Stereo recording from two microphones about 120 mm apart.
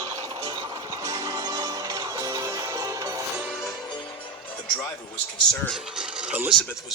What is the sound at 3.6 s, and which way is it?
Music, 35° left (ahead or behind).